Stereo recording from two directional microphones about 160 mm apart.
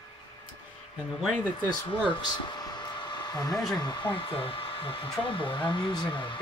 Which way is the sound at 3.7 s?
25° left (ahead or behind).